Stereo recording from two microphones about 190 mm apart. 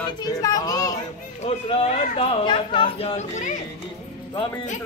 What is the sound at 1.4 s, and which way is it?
Chatter, 35° left (ahead or behind).